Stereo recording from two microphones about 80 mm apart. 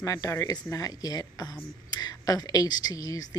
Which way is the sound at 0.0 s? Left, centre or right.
Left.